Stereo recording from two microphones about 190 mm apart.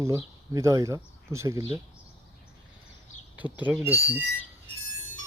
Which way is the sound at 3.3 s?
10° right (ahead or behind).